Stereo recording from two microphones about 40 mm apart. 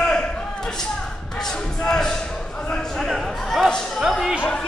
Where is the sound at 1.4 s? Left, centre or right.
Centre.